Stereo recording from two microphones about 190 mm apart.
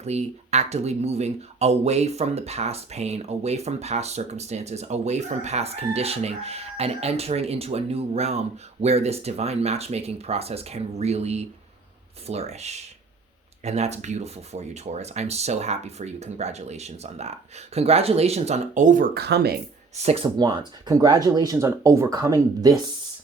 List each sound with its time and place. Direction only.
0.0 s speech: 35° right (ahead or behind); by 19.5 s 55° right (ahead or behind)
20.0 s speech: 30° right (ahead or behind)